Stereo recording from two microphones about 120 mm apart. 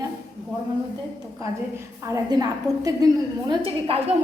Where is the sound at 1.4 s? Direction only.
25° right (ahead or behind).